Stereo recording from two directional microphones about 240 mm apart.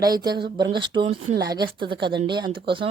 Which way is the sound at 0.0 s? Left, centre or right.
Centre.